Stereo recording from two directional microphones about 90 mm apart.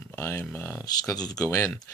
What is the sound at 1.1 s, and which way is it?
Speech, 45° left (ahead or behind).